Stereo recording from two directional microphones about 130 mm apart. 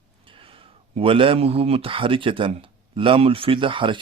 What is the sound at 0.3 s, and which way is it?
Speech, 45° right (ahead or behind).